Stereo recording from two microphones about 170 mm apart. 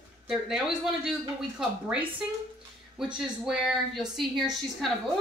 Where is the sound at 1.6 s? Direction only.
5° right (ahead or behind).